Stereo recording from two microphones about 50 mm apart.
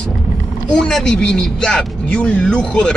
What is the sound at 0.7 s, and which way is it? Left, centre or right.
Speech, centre.